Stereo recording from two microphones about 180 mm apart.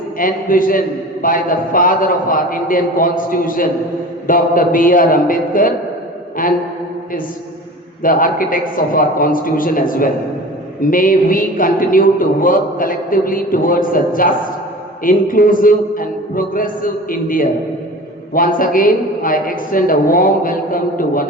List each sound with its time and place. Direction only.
0.2 s a man's voice: 50° left (ahead or behind)
8.0 s a man's voice: 50° left (ahead or behind)